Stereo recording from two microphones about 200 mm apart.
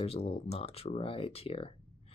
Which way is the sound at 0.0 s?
30° left (ahead or behind).